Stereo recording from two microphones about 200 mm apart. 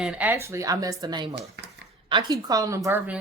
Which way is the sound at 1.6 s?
60° right (ahead or behind).